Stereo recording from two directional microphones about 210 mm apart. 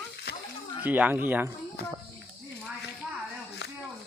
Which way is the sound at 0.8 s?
10° right (ahead or behind).